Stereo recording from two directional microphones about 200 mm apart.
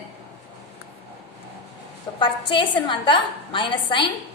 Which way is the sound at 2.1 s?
25° left (ahead or behind).